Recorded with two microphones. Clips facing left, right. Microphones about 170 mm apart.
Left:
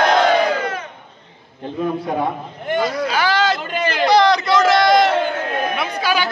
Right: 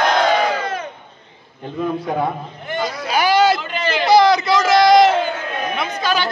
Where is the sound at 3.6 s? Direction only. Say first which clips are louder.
Left 2 dB; 50° left (ahead or behind).